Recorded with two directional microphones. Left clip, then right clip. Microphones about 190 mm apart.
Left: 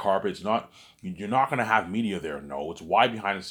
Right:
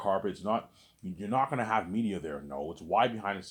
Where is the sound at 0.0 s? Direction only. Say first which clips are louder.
Left 5 dB; 15° left (ahead or behind).